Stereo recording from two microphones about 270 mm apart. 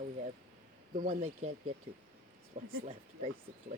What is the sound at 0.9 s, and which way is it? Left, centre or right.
Speech, right.